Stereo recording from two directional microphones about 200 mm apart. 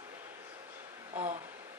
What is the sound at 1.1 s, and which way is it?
Speech, 35° right (ahead or behind).